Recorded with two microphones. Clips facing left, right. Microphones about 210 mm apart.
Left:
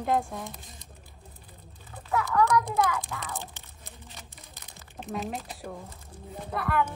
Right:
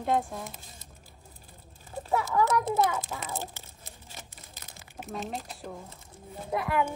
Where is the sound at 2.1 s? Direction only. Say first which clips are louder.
Left 1 dB; 30° right (ahead or behind).